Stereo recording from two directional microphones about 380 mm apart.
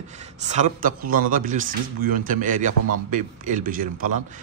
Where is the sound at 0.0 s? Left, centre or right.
Centre.